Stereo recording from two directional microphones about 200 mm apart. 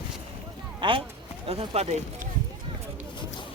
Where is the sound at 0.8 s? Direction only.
25° right (ahead or behind).